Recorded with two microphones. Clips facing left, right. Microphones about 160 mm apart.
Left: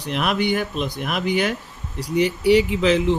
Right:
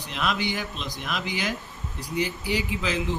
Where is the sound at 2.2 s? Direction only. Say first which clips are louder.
Left 12 dB; 70° left (ahead or behind).